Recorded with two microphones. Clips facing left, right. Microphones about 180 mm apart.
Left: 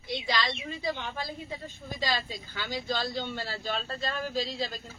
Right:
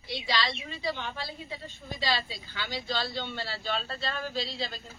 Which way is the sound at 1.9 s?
45° left (ahead or behind).